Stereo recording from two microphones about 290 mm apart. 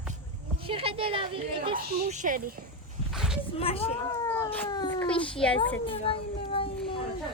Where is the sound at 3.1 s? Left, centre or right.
Centre.